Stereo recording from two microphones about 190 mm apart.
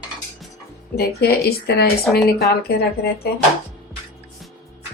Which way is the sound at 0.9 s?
55° left (ahead or behind).